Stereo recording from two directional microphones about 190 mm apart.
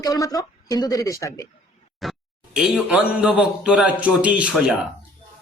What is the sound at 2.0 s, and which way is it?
Speech, centre (ahead or behind).